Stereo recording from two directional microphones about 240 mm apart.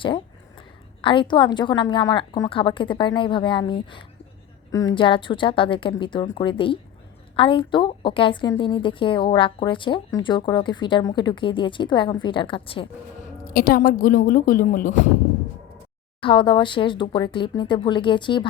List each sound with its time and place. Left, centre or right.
1.0 s a woman's voice: centre
13.5 s speech: left
16.2 s a woman's voice: centre